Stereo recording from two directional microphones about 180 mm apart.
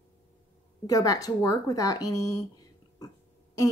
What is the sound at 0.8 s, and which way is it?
Speech, 20° left (ahead or behind).